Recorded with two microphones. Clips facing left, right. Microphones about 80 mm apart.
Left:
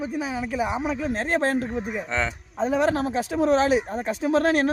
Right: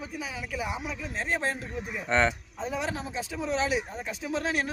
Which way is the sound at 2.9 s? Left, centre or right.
Left.